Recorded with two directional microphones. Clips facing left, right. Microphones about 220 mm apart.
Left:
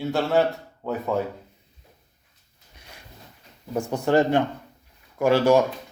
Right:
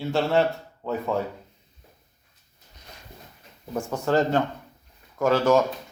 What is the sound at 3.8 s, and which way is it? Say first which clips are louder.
Speech: left 2 dB; 15° left (ahead or behind).